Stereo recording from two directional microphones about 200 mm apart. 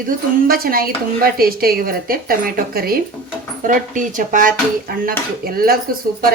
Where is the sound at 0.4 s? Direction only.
45° right (ahead or behind).